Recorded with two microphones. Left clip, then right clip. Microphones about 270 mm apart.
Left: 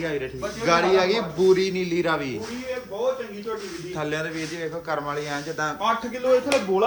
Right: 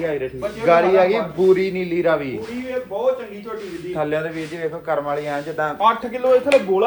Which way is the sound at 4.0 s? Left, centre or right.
Centre.